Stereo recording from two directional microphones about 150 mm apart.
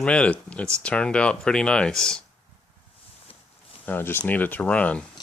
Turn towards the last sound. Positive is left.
turn(degrees=10)  # may be behind; listen again after turning